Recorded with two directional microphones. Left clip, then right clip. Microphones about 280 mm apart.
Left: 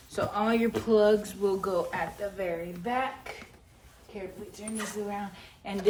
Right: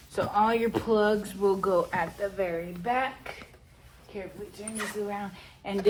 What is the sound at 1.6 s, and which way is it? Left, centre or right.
Speech, centre.